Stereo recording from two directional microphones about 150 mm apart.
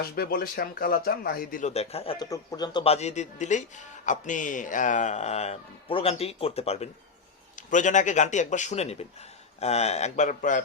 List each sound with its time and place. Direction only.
0.2 s speech: 85° left; by 1.7 s 70° left (ahead or behind)
1.7 s speech: 45° left (ahead or behind)
2.1 s speech: 25° left (ahead or behind)
2.8 s speech: 45° left (ahead or behind)
7.5 s speech: 55° left (ahead or behind)